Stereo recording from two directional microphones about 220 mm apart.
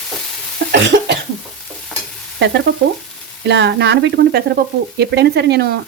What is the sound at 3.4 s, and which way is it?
Speech, 50° right (ahead or behind).